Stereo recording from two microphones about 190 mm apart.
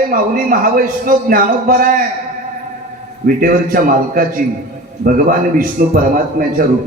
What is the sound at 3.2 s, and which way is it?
Music, 50° right (ahead or behind).